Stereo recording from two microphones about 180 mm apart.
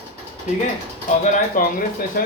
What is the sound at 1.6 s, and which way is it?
Speech, 50° left (ahead or behind).